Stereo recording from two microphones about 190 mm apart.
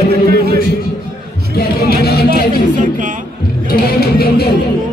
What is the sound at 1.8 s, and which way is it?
Music, 55° left (ahead or behind).